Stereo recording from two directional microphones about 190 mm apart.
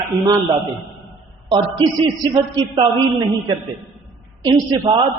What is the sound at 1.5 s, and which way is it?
A woman's voice, 25° right (ahead or behind).